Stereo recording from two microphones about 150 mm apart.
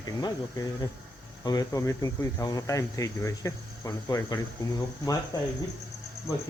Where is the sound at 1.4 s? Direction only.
25° left (ahead or behind).